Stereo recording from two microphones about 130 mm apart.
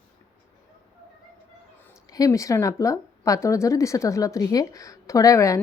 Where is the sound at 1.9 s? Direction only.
25° left (ahead or behind).